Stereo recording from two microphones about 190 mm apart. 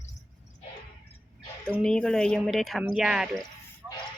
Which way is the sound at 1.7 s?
5° left (ahead or behind).